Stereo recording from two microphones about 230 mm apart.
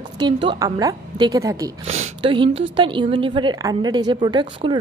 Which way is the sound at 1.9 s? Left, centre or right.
Right.